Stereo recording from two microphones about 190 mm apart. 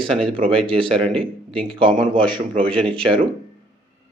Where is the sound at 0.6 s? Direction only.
30° right (ahead or behind).